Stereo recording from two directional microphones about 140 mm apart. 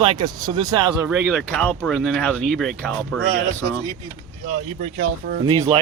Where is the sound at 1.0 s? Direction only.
5° right (ahead or behind).